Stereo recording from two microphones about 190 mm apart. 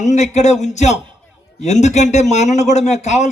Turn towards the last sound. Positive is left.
turn(degrees=40)  # may be behind; listen again after turning